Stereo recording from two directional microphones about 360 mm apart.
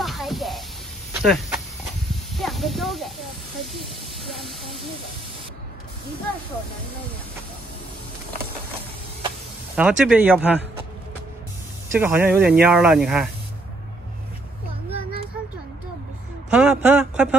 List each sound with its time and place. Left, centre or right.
0.0 s a sound: centre
3.7 s speech: centre
9.8 s a man's voice: centre
11.9 s a man's voice: centre
14.9 s a sound: centre
16.4 s a man's voice: centre